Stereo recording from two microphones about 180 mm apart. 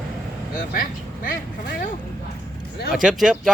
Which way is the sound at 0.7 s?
50° left (ahead or behind).